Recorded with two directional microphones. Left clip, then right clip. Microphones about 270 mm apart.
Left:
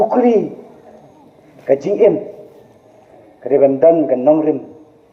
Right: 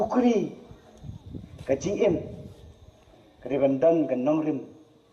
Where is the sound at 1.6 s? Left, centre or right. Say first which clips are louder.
Left 12 dB; right.